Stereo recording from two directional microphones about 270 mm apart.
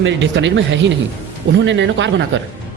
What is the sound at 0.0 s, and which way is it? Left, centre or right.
A man's voice, right.